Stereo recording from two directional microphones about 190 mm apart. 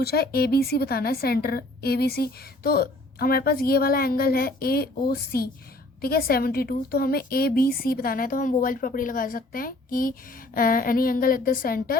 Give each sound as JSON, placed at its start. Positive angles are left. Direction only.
{"t": 0.0, "sound": "a woman's voice", "side_deg": 55}